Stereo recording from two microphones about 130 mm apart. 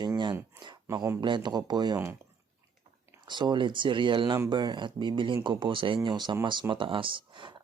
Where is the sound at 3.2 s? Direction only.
35° right (ahead or behind).